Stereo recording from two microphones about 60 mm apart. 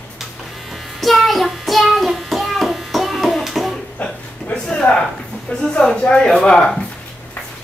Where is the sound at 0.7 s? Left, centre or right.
Centre.